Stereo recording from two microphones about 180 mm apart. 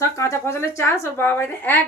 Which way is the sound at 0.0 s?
15° left (ahead or behind).